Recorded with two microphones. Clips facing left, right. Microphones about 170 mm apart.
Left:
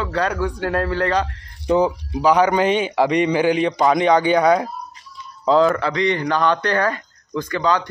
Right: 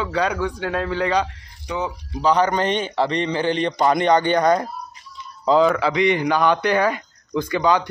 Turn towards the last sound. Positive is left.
turn(degrees=-10)  # may be behind; listen again after turning